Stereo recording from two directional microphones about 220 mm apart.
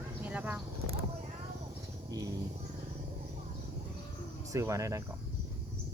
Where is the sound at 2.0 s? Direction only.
15° right (ahead or behind).